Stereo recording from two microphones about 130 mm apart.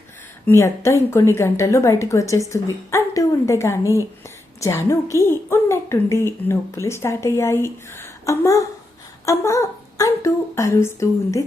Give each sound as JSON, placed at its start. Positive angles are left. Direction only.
{"t": 0.4, "sound": "a woman's voice", "side_deg": 20}